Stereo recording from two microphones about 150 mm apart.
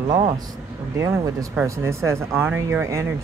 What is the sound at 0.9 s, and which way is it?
Speech, 20° right (ahead or behind).